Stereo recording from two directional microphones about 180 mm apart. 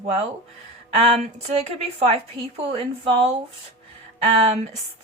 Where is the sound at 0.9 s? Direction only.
35° right (ahead or behind).